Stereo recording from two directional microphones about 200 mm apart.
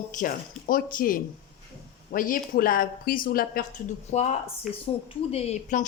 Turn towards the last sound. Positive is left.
turn(degrees=35)  # may be behind; listen again after turning